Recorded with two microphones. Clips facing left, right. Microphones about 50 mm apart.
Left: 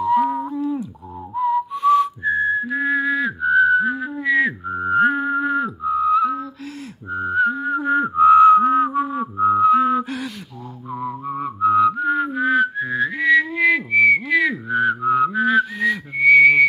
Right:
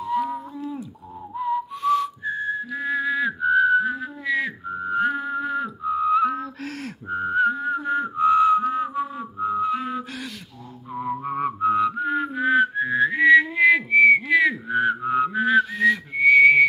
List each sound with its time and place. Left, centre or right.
0.0 s a sound: centre
1.3 s whistling: centre
1.9 s whistling: centre
7.2 s music: centre
7.9 s whistling: centre
11.2 s music: right
11.6 s whistling: centre